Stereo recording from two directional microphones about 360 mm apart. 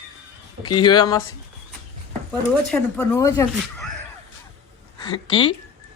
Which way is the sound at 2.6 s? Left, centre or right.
Centre.